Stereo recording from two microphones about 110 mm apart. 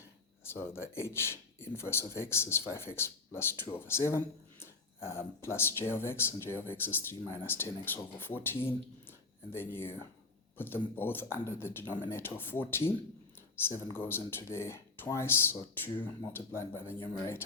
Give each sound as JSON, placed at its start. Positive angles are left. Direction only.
{"t": 0.4, "sound": "speech", "side_deg": 25}
{"t": 13.9, "sound": "speech", "side_deg": 20}